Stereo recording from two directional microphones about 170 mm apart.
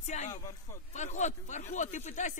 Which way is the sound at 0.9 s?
45° left (ahead or behind).